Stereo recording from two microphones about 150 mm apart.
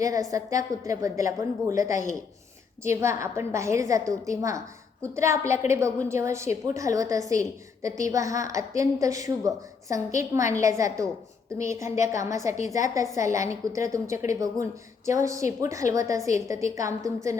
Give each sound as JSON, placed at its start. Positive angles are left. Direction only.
{"t": 0.0, "sound": "a woman's voice", "side_deg": -20}